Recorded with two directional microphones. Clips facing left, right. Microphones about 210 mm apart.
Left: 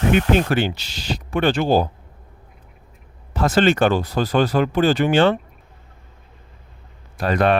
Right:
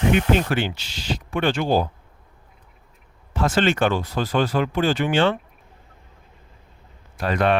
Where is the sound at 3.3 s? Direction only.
40° left (ahead or behind).